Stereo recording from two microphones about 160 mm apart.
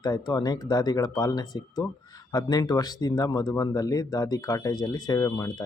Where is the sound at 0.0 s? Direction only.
25° left (ahead or behind).